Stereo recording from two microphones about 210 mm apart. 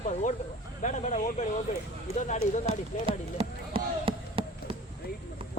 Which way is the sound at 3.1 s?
25° right (ahead or behind).